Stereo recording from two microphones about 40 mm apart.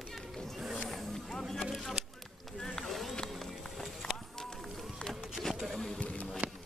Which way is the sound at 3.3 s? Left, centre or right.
Centre.